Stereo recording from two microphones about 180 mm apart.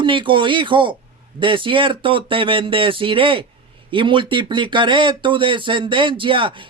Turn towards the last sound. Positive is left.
turn(degrees=-30)  # may be behind; listen again after turning